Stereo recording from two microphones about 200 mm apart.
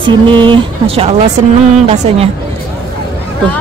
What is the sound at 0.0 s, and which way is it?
Speech, 25° right (ahead or behind).